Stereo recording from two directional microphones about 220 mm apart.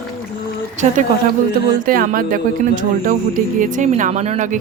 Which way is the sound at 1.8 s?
40° right (ahead or behind).